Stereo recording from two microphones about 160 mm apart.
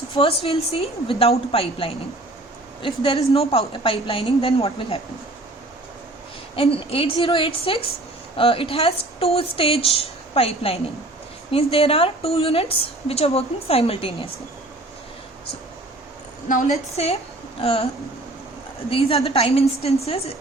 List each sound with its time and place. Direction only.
0.1 s a woman's voice: 35° left (ahead or behind)
6.6 s a woman's voice: 35° left (ahead or behind)
16.5 s a woman's voice: 45° left (ahead or behind)
18.9 s a woman's voice: 35° left (ahead or behind)